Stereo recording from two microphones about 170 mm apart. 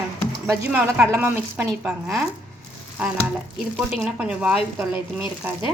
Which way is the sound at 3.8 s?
5° right (ahead or behind).